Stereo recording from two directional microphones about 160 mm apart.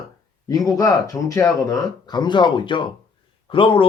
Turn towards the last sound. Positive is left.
turn(degrees=35)  # may be behind; listen again after turning